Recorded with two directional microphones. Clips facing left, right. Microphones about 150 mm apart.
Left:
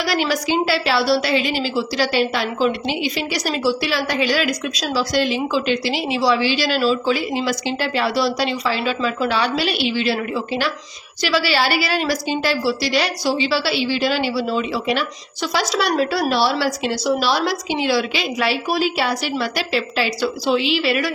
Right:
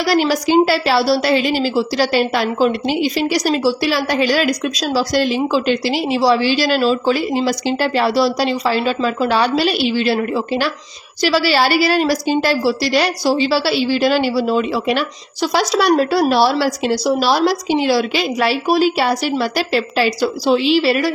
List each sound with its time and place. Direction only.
0.0 s a woman's voice: 40° right (ahead or behind)